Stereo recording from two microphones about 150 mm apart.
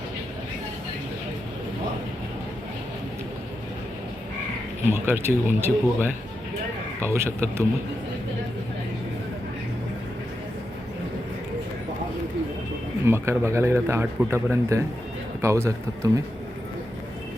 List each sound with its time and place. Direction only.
4.9 s a man's voice: 15° right (ahead or behind)
13.1 s a man's voice: 15° right (ahead or behind)